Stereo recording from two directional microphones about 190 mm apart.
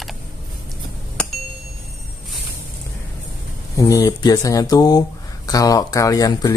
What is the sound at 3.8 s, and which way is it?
Speech, 20° left (ahead or behind).